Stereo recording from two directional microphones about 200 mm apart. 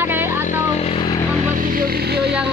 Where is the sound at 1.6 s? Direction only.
45° right (ahead or behind).